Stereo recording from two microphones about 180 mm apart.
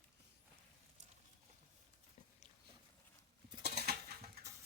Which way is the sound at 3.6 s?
65° right (ahead or behind).